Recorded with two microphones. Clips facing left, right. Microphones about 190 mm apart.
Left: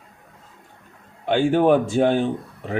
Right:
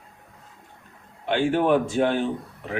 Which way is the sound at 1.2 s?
40° left (ahead or behind).